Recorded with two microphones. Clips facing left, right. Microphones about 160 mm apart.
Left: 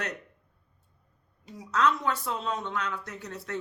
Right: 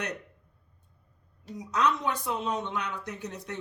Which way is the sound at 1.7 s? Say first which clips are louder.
Left 1 dB; 15° right (ahead or behind).